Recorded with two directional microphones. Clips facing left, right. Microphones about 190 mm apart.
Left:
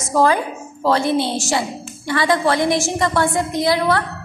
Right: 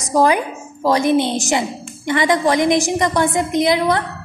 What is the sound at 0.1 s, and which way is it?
A woman's voice, 15° right (ahead or behind).